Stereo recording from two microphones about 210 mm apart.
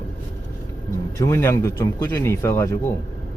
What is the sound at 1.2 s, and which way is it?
Speech, 10° left (ahead or behind).